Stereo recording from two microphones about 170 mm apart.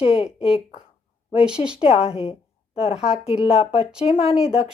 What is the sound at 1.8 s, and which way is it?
Speech, 35° left (ahead or behind).